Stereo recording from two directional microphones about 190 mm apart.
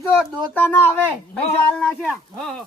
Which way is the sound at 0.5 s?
10° left (ahead or behind).